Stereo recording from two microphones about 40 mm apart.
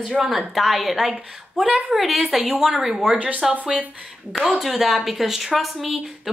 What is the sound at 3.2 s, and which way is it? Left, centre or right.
Speech, right.